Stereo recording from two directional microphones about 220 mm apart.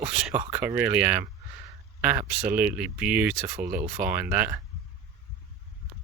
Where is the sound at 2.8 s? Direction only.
5° right (ahead or behind).